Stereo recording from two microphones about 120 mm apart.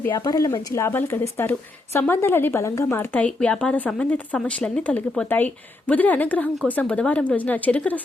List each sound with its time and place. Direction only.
0.3 s a woman's voice: 30° left (ahead or behind); by 7.9 s 15° left (ahead or behind)